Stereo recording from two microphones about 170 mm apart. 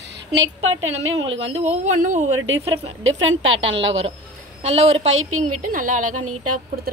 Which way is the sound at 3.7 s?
90° right.